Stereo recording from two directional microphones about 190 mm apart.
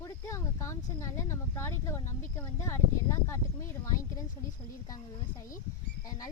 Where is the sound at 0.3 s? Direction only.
15° left (ahead or behind).